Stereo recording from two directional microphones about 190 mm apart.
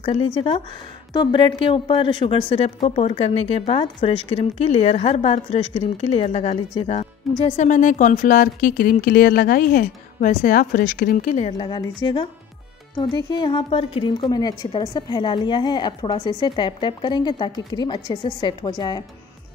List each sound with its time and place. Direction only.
0.0 s speech: 30° left (ahead or behind)